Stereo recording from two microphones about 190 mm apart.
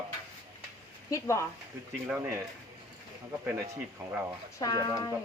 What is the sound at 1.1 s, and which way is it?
Speech, 15° left (ahead or behind).